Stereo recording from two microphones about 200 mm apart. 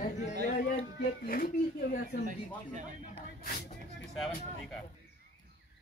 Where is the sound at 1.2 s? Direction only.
45° left (ahead or behind).